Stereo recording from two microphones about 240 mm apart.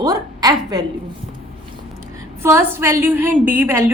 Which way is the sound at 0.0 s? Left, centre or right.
Centre.